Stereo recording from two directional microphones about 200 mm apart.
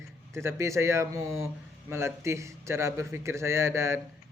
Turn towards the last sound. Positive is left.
turn(degrees=-15)  # may be behind; listen again after turning